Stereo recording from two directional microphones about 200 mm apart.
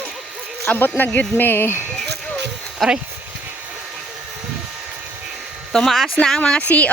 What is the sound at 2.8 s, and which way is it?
Speech, centre (ahead or behind).